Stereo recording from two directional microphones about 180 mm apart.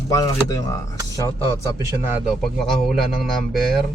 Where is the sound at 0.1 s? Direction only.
20° left (ahead or behind).